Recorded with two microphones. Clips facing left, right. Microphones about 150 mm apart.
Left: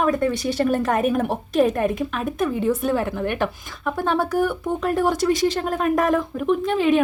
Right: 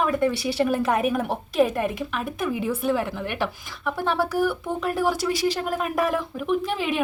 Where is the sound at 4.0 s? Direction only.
50° left (ahead or behind).